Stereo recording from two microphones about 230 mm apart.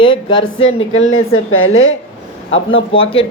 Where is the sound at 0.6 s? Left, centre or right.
Left.